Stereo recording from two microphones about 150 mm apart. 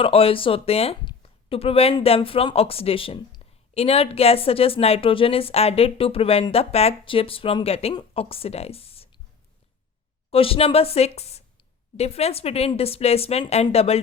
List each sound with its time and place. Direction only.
0.0 s a woman's voice: 40° left (ahead or behind)
10.3 s a woman's voice: 40° left (ahead or behind)